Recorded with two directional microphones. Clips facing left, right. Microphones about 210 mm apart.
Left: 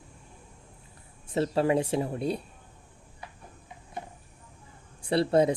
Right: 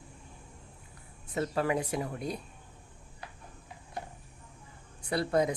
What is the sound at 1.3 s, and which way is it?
Speech, 30° left (ahead or behind).